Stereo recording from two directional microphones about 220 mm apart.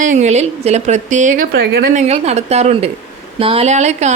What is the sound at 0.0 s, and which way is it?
A woman's voice, 35° right (ahead or behind).